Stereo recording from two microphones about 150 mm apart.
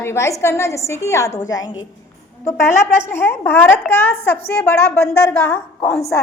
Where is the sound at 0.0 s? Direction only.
20° left (ahead or behind).